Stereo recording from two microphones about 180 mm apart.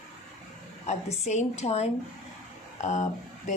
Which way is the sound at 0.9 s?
40° left (ahead or behind).